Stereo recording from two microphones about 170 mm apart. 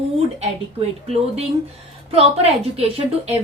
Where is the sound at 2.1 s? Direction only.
35° right (ahead or behind).